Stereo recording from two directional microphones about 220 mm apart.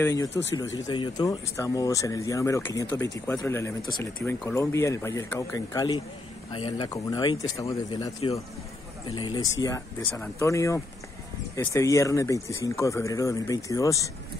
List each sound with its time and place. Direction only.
0.0 s speech: 15° left (ahead or behind)
0.3 s speech: 55° left (ahead or behind)
0.6 s speech: 15° left (ahead or behind)